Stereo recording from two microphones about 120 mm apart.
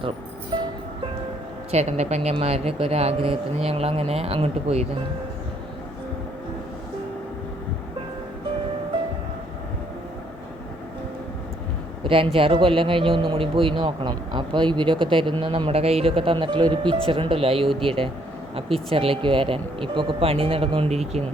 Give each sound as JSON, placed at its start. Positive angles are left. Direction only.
{"t": 1.7, "sound": "speech", "side_deg": -65}
{"t": 12.0, "sound": "a man's voice", "side_deg": -50}